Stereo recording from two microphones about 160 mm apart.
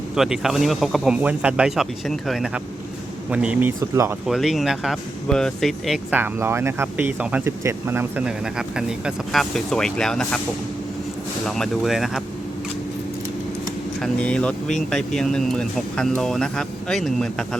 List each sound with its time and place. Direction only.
0.2 s speech: centre (ahead or behind)
3.8 s speech: 20° right (ahead or behind)
4.3 s speech: centre (ahead or behind)
6.1 s speech: 15° right (ahead or behind); by 10.4 s 5° left (ahead or behind)
11.4 s speech: centre (ahead or behind)
14.0 s speech: 5° left (ahead or behind)